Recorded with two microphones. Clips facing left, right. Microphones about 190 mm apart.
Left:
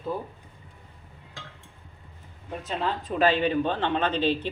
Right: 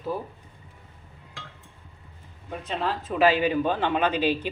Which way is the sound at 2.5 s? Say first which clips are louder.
Even; centre (ahead or behind).